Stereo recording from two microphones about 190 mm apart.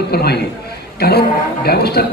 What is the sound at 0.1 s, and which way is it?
A man's voice, 55° left (ahead or behind).